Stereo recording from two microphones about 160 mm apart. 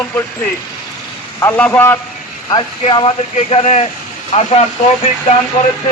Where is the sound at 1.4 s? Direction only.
10° left (ahead or behind).